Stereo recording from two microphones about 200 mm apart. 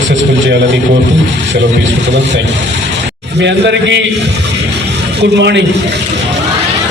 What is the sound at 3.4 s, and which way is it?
Speech, 60° right (ahead or behind).